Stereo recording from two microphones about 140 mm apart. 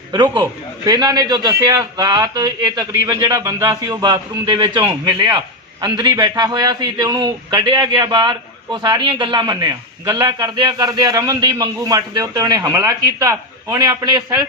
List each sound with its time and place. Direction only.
0.1 s a man's voice: 30° right (ahead or behind)